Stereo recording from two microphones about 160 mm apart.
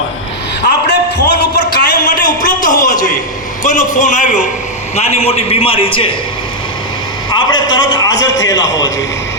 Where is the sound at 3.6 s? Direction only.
55° left (ahead or behind); by 6.1 s 35° left (ahead or behind).